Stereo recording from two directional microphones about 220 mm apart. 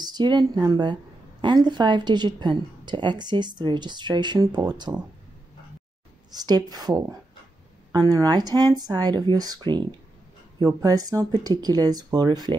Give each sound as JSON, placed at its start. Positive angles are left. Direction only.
{"t": 0.0, "sound": "a woman's voice", "side_deg": -20}
{"t": 6.3, "sound": "speech", "side_deg": -15}